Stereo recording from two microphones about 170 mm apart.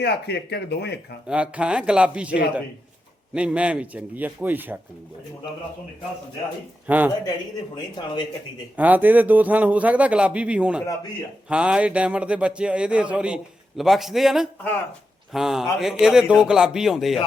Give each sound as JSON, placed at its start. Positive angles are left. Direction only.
{"t": 0.0, "sound": "speech", "side_deg": 75}
{"t": 1.3, "sound": "speech", "side_deg": -5}
{"t": 6.8, "sound": "speech", "side_deg": -10}
{"t": 7.9, "sound": "speech", "side_deg": 25}
{"t": 8.7, "sound": "a man's voice", "side_deg": -10}